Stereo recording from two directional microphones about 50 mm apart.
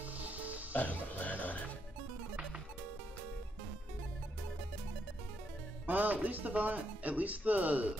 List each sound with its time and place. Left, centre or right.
0.0 s music: right
0.7 s music: left
5.9 s speech: right